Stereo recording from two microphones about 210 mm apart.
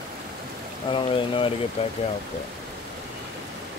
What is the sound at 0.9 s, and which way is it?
Speech, 25° left (ahead or behind).